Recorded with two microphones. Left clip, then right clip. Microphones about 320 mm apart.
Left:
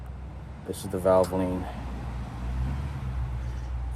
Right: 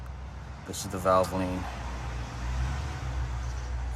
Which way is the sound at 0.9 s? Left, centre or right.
Centre.